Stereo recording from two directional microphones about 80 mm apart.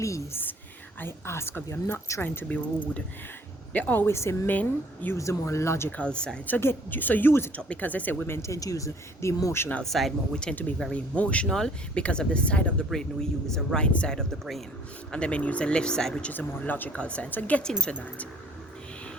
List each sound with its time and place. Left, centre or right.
0.9 s speech: left
4.0 s speech: left
4.4 s speech: left
5.1 s speech: left
6.0 s speech: centre
6.5 s speech: left
8.4 s speech: left
9.8 s speech: centre
10.5 s speech: left
16.3 s speech: left